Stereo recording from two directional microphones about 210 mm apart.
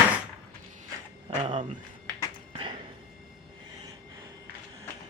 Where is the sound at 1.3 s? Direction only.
30° right (ahead or behind).